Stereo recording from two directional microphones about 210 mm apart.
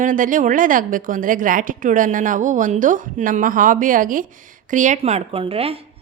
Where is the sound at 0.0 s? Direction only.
40° right (ahead or behind).